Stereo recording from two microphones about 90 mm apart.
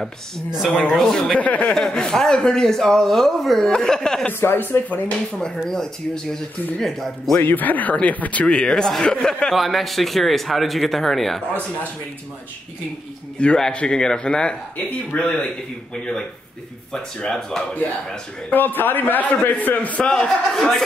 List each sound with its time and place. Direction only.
0.7 s a man's voice: 5° left (ahead or behind)
1.8 s a man's voice: 5° left (ahead or behind)
4.3 s a man's voice: 25° left (ahead or behind)
5.6 s speech: 5° left (ahead or behind)
7.3 s speech: 20° left (ahead or behind); by 11.4 s centre (ahead or behind)
13.4 s a man's voice: 10° left (ahead or behind)
18.5 s a man's voice: 20° left (ahead or behind)